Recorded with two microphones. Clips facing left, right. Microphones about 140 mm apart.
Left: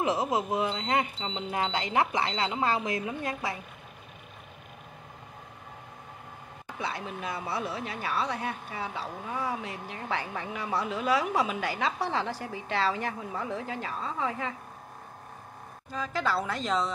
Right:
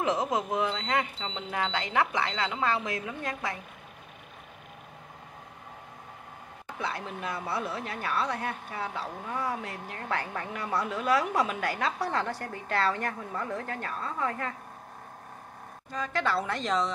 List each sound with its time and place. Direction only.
0.0 s speech: 5° left (ahead or behind)
6.8 s speech: centre (ahead or behind)
15.9 s speech: 5° left (ahead or behind)